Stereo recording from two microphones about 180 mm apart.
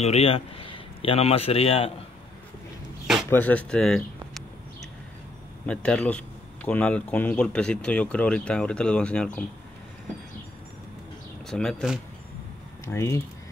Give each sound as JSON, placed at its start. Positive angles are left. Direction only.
{"t": 0.0, "sound": "speech", "side_deg": 35}
{"t": 3.3, "sound": "speech", "side_deg": 10}
{"t": 5.7, "sound": "speech", "side_deg": 5}
{"t": 11.4, "sound": "speech", "side_deg": 5}
{"t": 12.8, "sound": "speech", "side_deg": 15}